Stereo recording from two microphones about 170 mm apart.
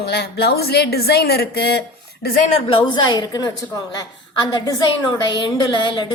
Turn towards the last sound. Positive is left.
turn(degrees=30)  # may be behind; listen again after turning